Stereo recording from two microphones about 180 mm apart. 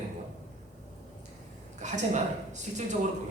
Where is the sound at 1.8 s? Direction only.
40° right (ahead or behind).